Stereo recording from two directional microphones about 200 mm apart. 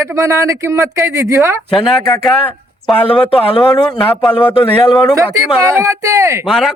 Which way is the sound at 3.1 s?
25° left (ahead or behind).